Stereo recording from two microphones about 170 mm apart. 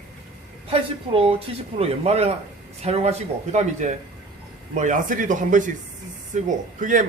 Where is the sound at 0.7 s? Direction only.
35° right (ahead or behind).